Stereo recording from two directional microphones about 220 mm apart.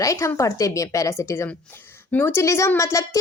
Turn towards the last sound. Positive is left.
turn(degrees=15)  # may be behind; listen again after turning